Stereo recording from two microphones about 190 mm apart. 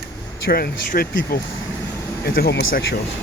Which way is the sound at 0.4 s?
55° left (ahead or behind).